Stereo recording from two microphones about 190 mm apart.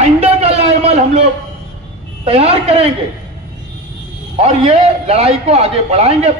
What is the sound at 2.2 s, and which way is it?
Speech, 30° right (ahead or behind).